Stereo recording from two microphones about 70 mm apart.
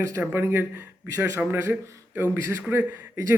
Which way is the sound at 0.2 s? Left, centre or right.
Right.